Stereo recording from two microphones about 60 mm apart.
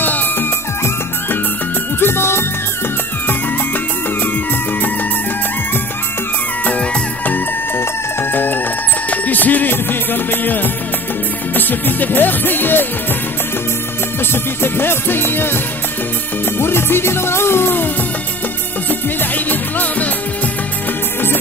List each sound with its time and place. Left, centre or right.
0.0 s music: left
2.0 s music: left
6.6 s music: left
7.7 s music: left
14.3 s music: left
18.9 s music: left